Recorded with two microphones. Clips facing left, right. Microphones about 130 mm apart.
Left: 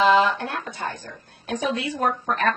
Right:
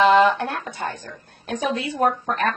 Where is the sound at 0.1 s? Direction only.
55° right (ahead or behind).